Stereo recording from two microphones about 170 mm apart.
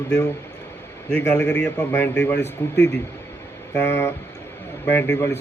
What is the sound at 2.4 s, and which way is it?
Speech, 90° left.